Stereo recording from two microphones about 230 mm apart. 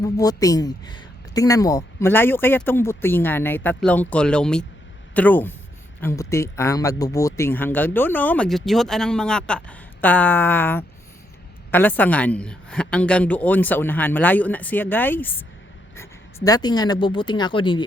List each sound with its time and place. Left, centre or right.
0.0 s speech: centre